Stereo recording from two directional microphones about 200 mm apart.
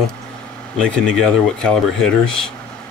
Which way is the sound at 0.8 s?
5° left (ahead or behind).